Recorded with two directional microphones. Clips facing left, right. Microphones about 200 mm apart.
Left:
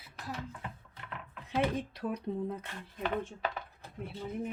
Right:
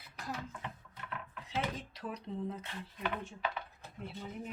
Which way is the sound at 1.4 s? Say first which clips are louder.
Left 7 dB; 55° left (ahead or behind).